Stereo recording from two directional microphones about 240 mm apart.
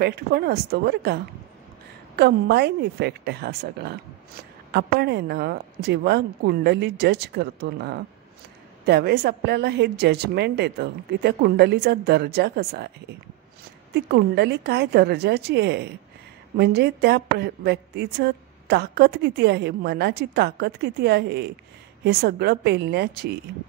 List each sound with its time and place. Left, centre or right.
0.0 s a woman's voice: right
13.9 s a woman's voice: right